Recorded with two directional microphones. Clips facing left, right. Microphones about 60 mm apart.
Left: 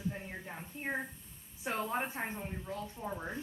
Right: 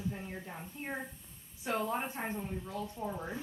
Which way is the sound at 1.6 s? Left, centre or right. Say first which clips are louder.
Right 1 dB; left.